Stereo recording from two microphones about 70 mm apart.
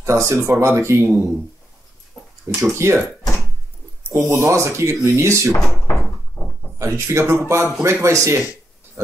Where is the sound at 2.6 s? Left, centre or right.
Right.